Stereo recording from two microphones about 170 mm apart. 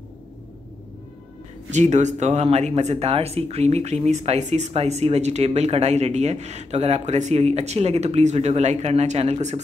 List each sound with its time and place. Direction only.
1.7 s speech: 45° right (ahead or behind)